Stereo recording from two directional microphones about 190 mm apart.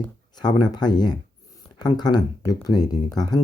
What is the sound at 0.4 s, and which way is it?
Speech, 20° left (ahead or behind).